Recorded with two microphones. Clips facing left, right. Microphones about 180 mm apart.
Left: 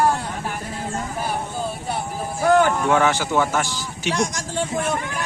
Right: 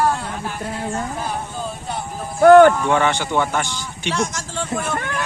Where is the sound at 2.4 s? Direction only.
65° right (ahead or behind).